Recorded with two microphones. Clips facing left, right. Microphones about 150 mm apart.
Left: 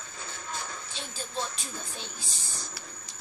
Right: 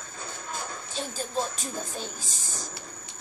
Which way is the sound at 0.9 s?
45° right (ahead or behind).